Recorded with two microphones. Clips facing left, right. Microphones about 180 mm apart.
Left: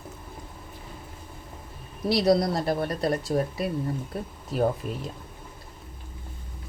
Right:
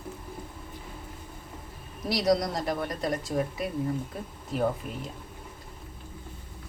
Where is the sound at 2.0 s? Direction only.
30° left (ahead or behind).